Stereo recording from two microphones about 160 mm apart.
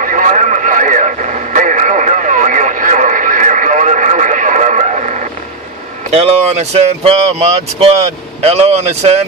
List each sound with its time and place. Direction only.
0.0 s radio: 55° right (ahead or behind)
6.1 s speech: 40° right (ahead or behind)